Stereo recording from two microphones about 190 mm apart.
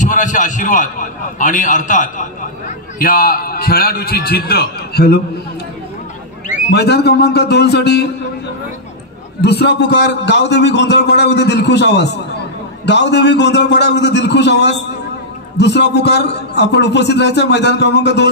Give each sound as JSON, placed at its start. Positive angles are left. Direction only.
{"t": 0.0, "sound": "a man's voice", "side_deg": 40}
{"t": 6.7, "sound": "a man's voice", "side_deg": 60}
{"t": 9.4, "sound": "a man's voice", "side_deg": 60}